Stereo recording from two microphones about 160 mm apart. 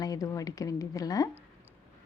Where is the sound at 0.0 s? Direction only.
20° left (ahead or behind).